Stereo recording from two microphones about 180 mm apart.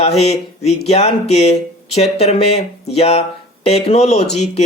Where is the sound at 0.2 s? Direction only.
35° left (ahead or behind).